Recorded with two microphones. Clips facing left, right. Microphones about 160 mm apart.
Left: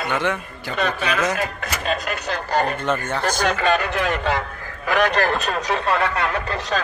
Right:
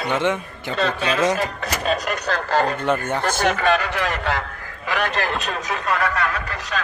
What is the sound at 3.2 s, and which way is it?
Speech, 25° right (ahead or behind).